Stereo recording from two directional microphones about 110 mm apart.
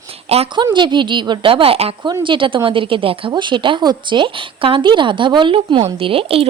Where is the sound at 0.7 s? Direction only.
45° right (ahead or behind); by 1.9 s 60° right (ahead or behind).